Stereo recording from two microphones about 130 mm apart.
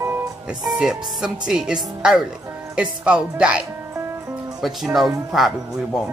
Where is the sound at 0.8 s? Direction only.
5° right (ahead or behind).